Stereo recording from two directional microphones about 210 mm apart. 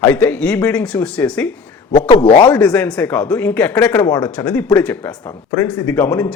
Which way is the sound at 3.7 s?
20° left (ahead or behind).